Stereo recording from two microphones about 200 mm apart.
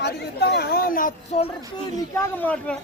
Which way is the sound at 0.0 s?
55° left (ahead or behind).